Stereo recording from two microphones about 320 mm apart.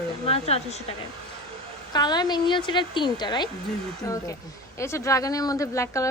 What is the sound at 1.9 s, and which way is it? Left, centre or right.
A woman's voice, centre.